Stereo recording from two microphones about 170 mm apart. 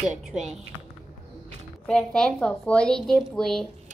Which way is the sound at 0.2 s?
5° right (ahead or behind).